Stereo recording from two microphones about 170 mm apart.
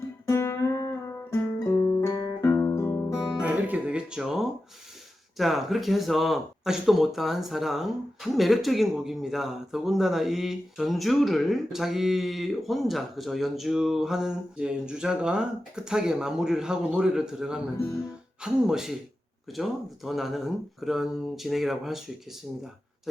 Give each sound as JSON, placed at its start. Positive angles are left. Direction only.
{"t": 0.3, "sound": "music", "side_deg": 15}
{"t": 3.4, "sound": "music", "side_deg": -5}
{"t": 5.4, "sound": "speech", "side_deg": 0}